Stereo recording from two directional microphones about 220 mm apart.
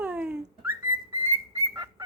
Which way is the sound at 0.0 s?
5° right (ahead or behind).